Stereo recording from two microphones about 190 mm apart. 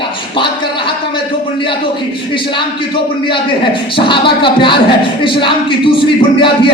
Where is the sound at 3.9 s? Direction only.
25° left (ahead or behind).